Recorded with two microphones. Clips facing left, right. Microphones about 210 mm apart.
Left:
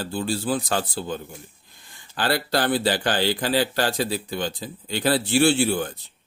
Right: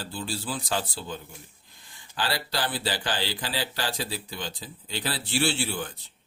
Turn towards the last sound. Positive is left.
turn(degrees=45)  # may be behind; listen again after turning